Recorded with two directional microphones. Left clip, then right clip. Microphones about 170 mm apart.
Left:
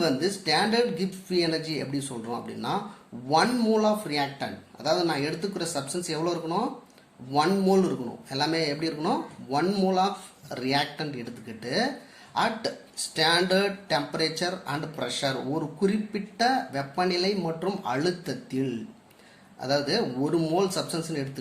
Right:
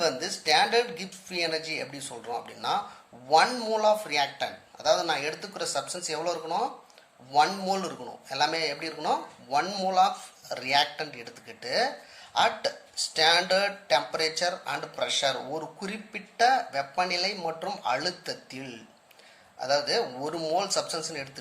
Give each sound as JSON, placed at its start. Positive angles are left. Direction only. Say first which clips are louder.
{"t": 0.0, "sound": "speech", "louder": "left 2 dB", "side_deg": -25}